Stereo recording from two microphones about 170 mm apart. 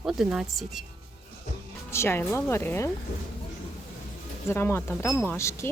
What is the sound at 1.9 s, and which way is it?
Speech, 15° left (ahead or behind).